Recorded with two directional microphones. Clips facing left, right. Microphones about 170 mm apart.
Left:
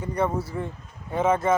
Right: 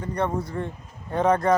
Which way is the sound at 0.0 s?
10° left (ahead or behind).